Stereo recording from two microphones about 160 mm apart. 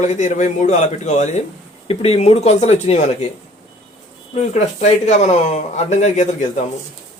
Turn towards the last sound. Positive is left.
turn(degrees=45)  # may be behind; listen again after turning